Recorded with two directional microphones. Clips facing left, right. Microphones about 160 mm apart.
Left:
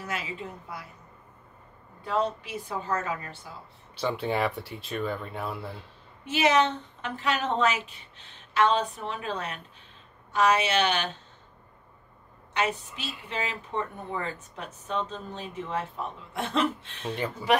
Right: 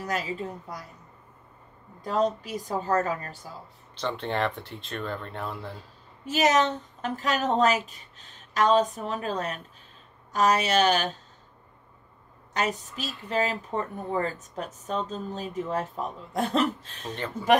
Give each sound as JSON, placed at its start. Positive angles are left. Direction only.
{"t": 0.0, "sound": "speech", "side_deg": -40}
{"t": 2.0, "sound": "speech", "side_deg": -40}
{"t": 3.9, "sound": "speech", "side_deg": 5}
{"t": 5.8, "sound": "speech", "side_deg": -40}
{"t": 12.5, "sound": "speech", "side_deg": -40}
{"t": 17.1, "sound": "speech", "side_deg": 10}